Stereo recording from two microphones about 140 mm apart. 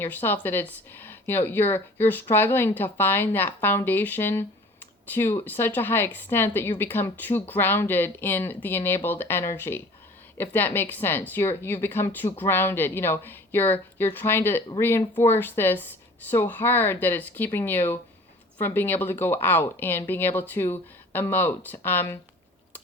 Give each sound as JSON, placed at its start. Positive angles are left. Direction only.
{"t": 0.0, "sound": "speech", "side_deg": 15}